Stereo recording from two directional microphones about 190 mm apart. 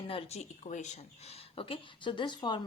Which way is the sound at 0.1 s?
30° left (ahead or behind).